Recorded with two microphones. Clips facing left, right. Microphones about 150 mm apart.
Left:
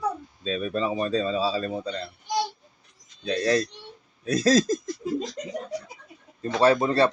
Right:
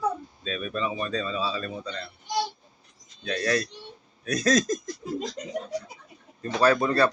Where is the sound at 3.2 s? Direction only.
30° left (ahead or behind).